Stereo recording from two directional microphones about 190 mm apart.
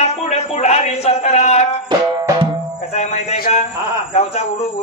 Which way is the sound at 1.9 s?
25° right (ahead or behind).